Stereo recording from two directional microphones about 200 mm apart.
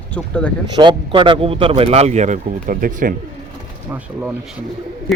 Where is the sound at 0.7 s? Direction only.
25° right (ahead or behind); by 3.1 s 45° right (ahead or behind).